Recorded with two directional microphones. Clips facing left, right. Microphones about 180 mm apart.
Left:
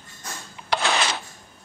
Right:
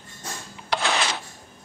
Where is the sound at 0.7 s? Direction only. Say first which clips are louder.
Left 1 dB; 70° left (ahead or behind).